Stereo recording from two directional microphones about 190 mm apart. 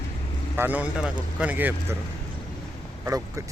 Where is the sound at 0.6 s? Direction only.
10° right (ahead or behind).